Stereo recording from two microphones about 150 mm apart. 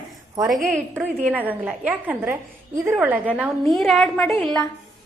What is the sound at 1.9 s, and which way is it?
A woman's voice, 15° right (ahead or behind).